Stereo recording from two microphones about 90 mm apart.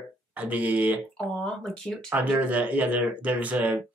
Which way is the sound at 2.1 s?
15° right (ahead or behind).